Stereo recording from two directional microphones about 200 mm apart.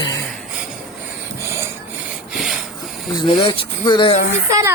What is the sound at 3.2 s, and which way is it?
Speech, 25° left (ahead or behind).